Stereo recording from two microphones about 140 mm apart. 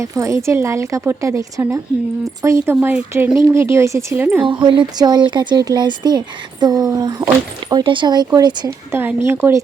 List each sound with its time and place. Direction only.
0.0 s speech: 20° right (ahead or behind)
4.4 s speech: 35° right (ahead or behind)
8.9 s speech: 15° right (ahead or behind)